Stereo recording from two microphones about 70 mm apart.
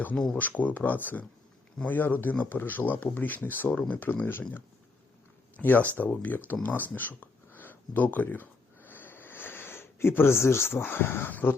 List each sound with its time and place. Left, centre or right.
0.3 s speech: left